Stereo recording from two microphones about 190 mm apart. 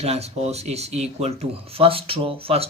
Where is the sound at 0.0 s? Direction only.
35° right (ahead or behind).